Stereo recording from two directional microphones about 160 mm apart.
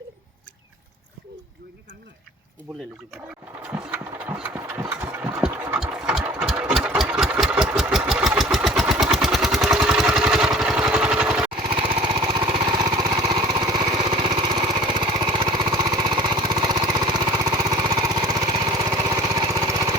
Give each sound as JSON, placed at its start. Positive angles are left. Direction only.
{"t": 3.9, "sound": "engine", "side_deg": -10}
{"t": 11.8, "sound": "lawn mower", "side_deg": -30}